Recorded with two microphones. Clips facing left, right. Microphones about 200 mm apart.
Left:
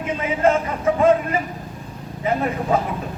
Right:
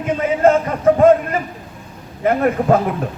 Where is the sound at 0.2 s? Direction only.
45° right (ahead or behind).